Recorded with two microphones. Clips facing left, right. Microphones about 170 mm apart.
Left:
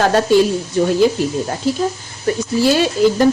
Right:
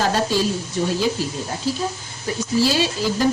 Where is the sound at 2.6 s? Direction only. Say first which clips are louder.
Left 7 dB; 55° left (ahead or behind).